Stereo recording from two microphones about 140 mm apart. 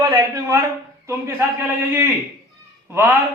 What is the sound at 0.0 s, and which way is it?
A man's voice, 25° right (ahead or behind).